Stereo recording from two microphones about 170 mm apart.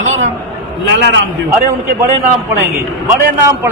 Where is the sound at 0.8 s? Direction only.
90° right.